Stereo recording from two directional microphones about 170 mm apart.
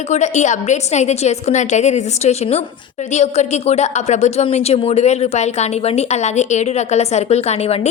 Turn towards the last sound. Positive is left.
turn(degrees=35)  # may be behind; listen again after turning